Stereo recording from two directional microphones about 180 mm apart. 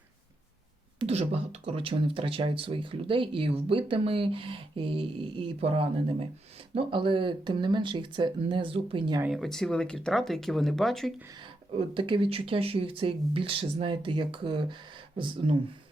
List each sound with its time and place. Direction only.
0.9 s speech: 30° right (ahead or behind)
9.2 s speech: centre (ahead or behind)
11.8 s speech: 30° right (ahead or behind)